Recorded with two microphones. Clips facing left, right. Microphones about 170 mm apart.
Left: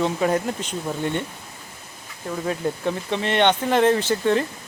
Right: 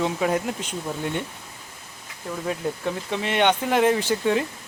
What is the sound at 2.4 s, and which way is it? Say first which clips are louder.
Speech: left 2 dB; centre (ahead or behind).